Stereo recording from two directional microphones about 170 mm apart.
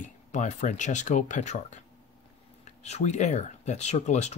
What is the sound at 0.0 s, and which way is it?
Speech, 45° left (ahead or behind).